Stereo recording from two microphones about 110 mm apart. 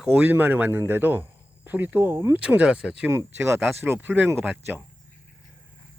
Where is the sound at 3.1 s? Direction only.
20° right (ahead or behind).